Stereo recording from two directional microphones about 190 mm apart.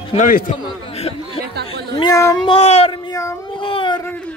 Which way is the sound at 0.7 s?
30° left (ahead or behind).